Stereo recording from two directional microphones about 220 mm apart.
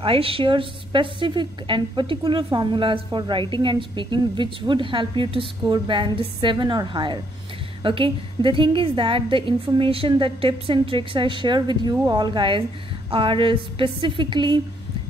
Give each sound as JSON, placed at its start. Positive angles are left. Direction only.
{"t": 0.0, "sound": "a woman's voice", "side_deg": -25}